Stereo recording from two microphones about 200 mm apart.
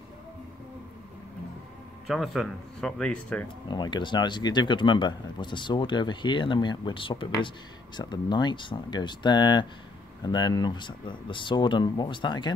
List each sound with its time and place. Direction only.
2.0 s speech: centre (ahead or behind)
3.4 s speech: 20° left (ahead or behind)